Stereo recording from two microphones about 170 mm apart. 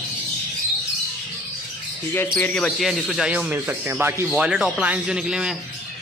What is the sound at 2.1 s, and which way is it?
Speech, 10° left (ahead or behind).